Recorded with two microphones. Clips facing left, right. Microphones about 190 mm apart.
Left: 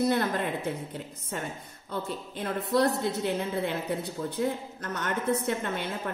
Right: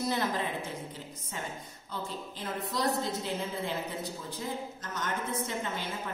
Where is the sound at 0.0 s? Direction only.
60° left (ahead or behind).